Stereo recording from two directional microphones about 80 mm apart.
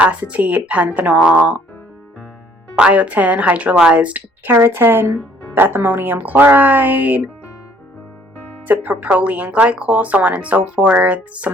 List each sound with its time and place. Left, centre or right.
0.0 s speech: centre
2.7 s speech: centre
4.5 s speech: right
8.6 s speech: right